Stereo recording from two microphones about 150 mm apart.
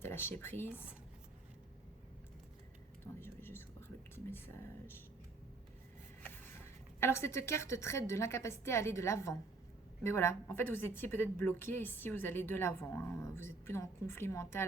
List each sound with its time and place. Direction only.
0.0 s speech: 15° left (ahead or behind)
3.2 s whispering: 15° left (ahead or behind)
7.0 s a woman's voice: 20° left (ahead or behind)